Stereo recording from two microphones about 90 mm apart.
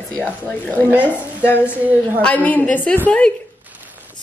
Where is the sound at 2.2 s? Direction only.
15° left (ahead or behind).